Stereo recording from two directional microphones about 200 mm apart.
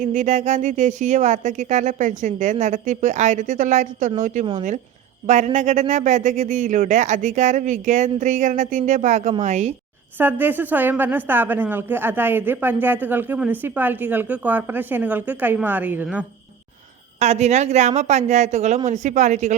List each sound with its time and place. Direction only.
0.1 s speech: 35° right (ahead or behind)
10.2 s a woman's voice: 10° right (ahead or behind)
17.2 s speech: 35° right (ahead or behind)